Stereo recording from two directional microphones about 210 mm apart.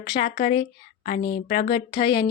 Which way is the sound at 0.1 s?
25° left (ahead or behind).